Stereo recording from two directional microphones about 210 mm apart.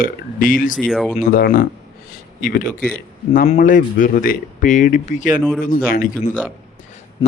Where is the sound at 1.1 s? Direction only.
45° left (ahead or behind).